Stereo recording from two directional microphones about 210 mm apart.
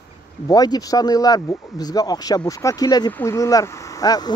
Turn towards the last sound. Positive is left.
turn(degrees=20)  # may be behind; listen again after turning